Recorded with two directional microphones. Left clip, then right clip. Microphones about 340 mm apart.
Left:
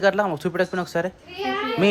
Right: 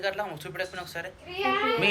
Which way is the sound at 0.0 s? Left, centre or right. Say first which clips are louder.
Left 11 dB; left.